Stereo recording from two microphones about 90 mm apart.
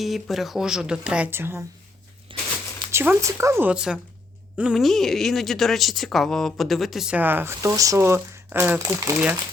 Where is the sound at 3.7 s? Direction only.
10° right (ahead or behind).